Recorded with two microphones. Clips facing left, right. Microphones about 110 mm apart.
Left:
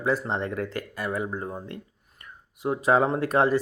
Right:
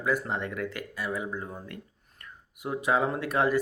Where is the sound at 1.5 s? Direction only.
25° left (ahead or behind).